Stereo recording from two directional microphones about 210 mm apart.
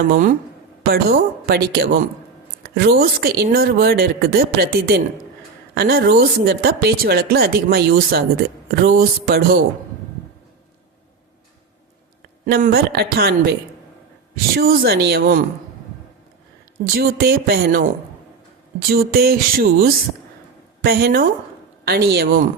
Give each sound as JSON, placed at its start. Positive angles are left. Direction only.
{"t": 0.1, "sound": "speech", "side_deg": -40}
{"t": 2.6, "sound": "a sound", "side_deg": -45}
{"t": 3.0, "sound": "speech", "side_deg": -50}
{"t": 12.5, "sound": "speech", "side_deg": -45}
{"t": 14.5, "sound": "speech", "side_deg": -45}
{"t": 16.9, "sound": "speech", "side_deg": -45}